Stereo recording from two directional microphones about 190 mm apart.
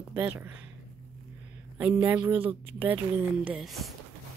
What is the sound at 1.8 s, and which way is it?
Speech, 5° right (ahead or behind).